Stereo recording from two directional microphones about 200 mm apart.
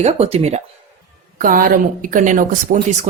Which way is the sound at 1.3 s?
45° right (ahead or behind).